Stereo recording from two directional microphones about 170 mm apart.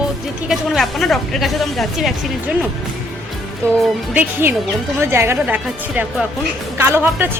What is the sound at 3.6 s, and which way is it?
A woman's voice, 15° right (ahead or behind).